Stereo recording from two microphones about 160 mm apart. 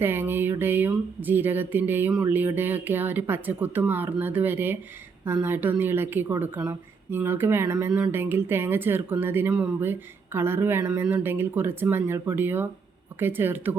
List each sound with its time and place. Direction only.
0.0 s music: 15° right (ahead or behind)
0.6 s speech: 10° right (ahead or behind)